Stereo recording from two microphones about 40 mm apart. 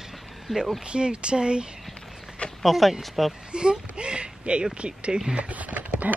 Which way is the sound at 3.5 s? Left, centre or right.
Right.